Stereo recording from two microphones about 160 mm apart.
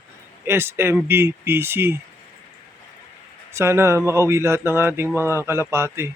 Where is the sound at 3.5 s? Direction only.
15° right (ahead or behind).